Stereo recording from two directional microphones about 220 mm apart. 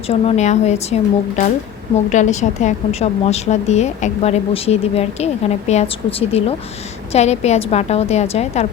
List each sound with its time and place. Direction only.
0.1 s a woman's voice: 30° left (ahead or behind)
2.0 s a woman's voice: 35° left (ahead or behind)